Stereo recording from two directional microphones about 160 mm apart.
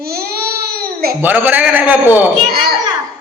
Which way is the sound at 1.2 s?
10° right (ahead or behind).